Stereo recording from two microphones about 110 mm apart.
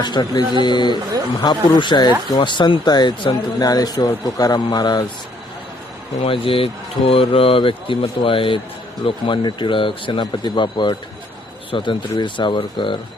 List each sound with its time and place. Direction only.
0.0 s speech: 40° left (ahead or behind)
6.1 s speech: 55° left (ahead or behind)